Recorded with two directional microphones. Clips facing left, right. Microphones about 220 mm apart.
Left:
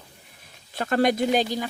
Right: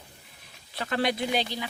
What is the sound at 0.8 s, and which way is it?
Speech, 45° left (ahead or behind).